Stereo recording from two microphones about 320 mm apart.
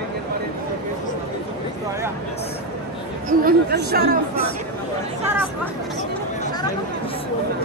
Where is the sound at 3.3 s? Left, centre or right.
Right.